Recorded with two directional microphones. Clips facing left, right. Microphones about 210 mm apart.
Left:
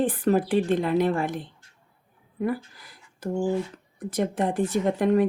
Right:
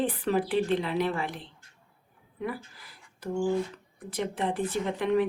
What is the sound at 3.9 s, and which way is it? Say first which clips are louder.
A woman's voice: left 6 dB; 45° left (ahead or behind).